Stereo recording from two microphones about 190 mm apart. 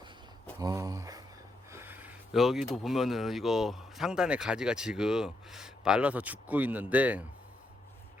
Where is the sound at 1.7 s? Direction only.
10° right (ahead or behind).